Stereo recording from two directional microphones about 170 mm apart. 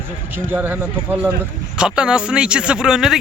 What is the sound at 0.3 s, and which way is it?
Speech, 10° right (ahead or behind).